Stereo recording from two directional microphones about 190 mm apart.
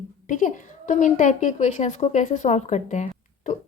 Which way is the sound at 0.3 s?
40° left (ahead or behind).